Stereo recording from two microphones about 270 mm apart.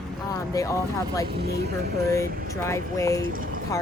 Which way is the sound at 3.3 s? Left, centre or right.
Right.